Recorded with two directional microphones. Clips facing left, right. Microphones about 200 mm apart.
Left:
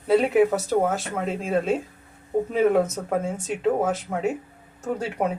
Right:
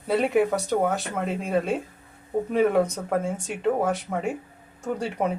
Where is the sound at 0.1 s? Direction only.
Centre (ahead or behind).